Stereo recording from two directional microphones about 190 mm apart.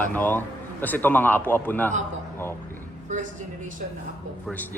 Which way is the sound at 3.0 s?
40° right (ahead or behind).